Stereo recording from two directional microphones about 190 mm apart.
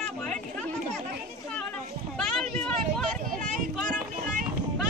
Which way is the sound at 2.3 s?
5° left (ahead or behind).